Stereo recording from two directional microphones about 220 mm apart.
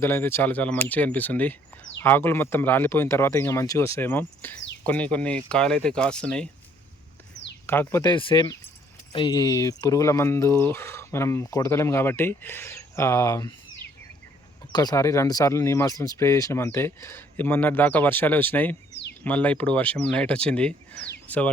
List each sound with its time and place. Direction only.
0.0 s speech: 10° left (ahead or behind)
7.7 s speech: 10° left (ahead or behind)
14.7 s speech: 20° left (ahead or behind)